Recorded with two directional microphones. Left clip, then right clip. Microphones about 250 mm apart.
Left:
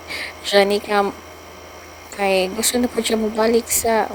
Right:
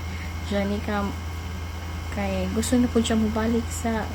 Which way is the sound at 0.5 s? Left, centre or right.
Left.